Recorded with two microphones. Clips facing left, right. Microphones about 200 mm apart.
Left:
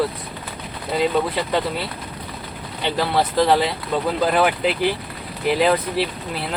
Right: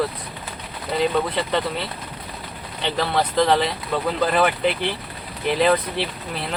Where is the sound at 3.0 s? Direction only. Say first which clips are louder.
Left 1 dB; 5° left (ahead or behind).